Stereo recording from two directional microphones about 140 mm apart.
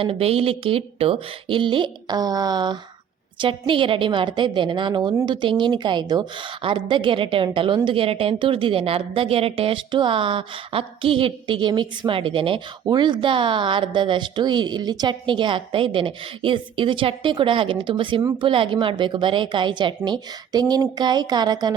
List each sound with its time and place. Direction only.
0.0 s a woman's voice: 45° right (ahead or behind)